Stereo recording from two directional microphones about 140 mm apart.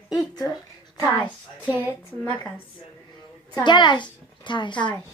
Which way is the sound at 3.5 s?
35° left (ahead or behind).